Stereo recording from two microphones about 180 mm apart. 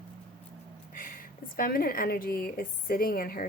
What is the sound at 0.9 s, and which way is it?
A woman's voice, 50° left (ahead or behind).